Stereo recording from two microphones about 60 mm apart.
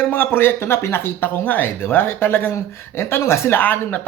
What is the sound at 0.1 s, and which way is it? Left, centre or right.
Speech, left.